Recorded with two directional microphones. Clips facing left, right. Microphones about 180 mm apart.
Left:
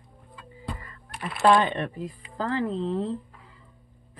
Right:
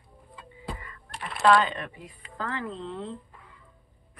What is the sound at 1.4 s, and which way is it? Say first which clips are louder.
Speech: left 1 dB; 20° left (ahead or behind).